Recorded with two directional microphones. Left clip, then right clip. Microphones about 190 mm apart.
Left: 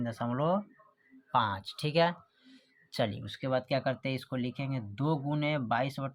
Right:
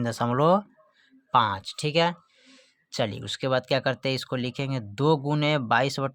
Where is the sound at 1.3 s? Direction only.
35° right (ahead or behind).